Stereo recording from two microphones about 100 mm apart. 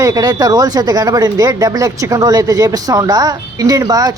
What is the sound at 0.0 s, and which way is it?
Speech, 40° right (ahead or behind).